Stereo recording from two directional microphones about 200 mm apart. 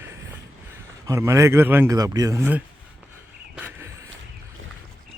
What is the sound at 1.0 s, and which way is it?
A man's voice, 15° right (ahead or behind).